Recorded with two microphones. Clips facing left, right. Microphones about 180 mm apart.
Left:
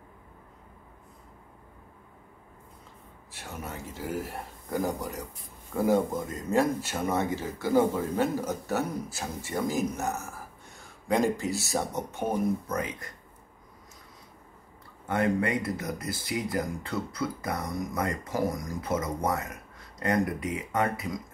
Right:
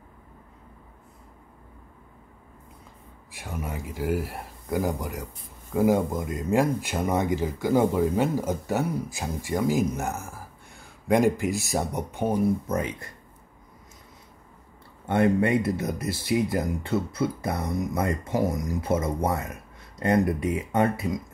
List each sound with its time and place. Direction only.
3.3 s speech: 10° right (ahead or behind)
12.6 s speech: 25° right (ahead or behind)
15.0 s speech: 25° right (ahead or behind)